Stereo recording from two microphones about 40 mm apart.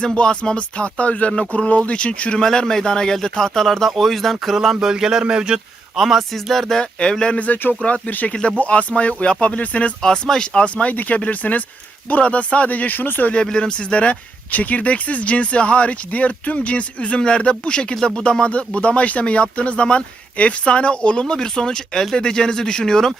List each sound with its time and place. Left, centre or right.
0.0 s speech: left
2.4 s speech: centre
4.8 s speech: centre
6.0 s speech: centre
6.3 s speech: centre
6.7 s speech: left
7.3 s speech: left
10.0 s speech: centre
10.8 s speech: left
13.3 s speech: left